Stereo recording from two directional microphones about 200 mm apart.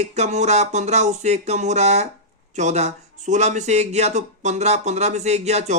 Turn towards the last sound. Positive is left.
turn(degrees=-35)  # may be behind; listen again after turning